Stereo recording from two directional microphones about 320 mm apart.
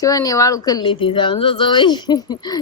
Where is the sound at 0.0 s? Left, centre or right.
Centre.